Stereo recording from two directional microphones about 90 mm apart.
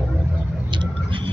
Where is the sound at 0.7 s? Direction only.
65° right (ahead or behind).